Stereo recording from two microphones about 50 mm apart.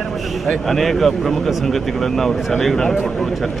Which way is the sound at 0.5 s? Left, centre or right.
Centre.